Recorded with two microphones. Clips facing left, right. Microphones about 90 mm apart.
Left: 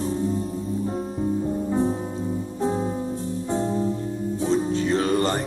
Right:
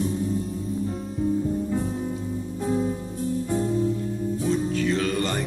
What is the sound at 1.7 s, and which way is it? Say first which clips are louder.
Music: left 3 dB; 30° left (ahead or behind).